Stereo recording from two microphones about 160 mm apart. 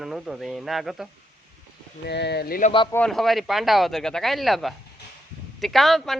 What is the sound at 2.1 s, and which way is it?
Speech, 90° left.